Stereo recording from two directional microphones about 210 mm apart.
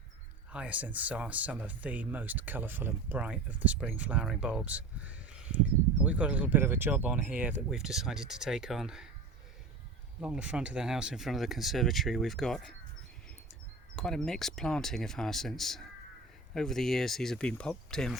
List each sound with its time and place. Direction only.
0.5 s speech: 5° right (ahead or behind)
10.2 s speech: 5° right (ahead or behind)
13.9 s speech: 5° left (ahead or behind)